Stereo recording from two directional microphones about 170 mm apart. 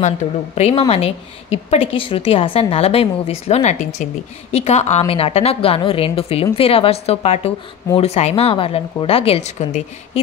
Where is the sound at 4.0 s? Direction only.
50° left (ahead or behind).